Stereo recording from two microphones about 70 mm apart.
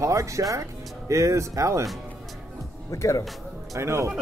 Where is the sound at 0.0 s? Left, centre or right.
Right.